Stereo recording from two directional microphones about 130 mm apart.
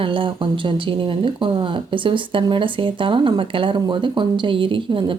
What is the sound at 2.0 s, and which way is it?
Speech, 40° right (ahead or behind).